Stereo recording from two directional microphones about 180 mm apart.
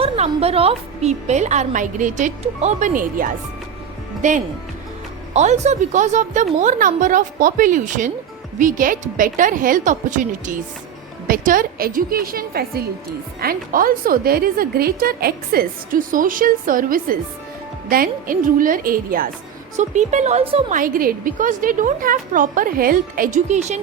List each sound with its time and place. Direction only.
0.0 s a woman's voice: 35° right (ahead or behind); by 19.3 s 50° right (ahead or behind)
19.7 s a woman's voice: 40° right (ahead or behind)
20.7 s a woman's voice: 50° right (ahead or behind)